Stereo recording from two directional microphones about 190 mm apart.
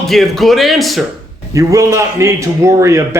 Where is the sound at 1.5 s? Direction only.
15° right (ahead or behind).